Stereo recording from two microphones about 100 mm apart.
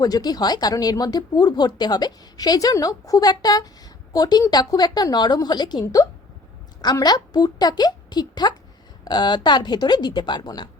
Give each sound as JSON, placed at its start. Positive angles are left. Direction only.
{"t": 0.0, "sound": "speech", "side_deg": 40}
{"t": 5.8, "sound": "a woman's voice", "side_deg": 35}